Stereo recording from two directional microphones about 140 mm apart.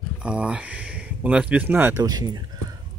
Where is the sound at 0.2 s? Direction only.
10° right (ahead or behind).